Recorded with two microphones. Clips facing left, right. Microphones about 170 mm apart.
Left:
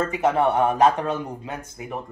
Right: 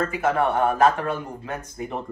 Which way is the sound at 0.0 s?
20° left (ahead or behind).